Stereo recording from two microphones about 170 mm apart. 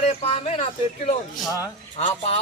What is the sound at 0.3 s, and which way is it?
Speech, 40° left (ahead or behind).